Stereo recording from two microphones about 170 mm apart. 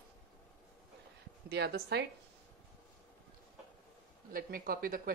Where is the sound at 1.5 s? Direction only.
75° right (ahead or behind).